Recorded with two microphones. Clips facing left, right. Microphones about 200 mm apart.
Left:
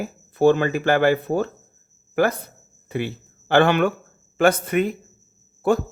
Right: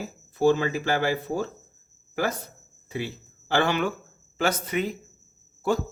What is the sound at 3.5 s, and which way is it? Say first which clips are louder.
Speech: left 7 dB; 60° left (ahead or behind).